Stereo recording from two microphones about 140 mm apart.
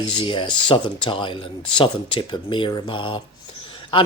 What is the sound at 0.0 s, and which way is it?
Speech, 35° left (ahead or behind).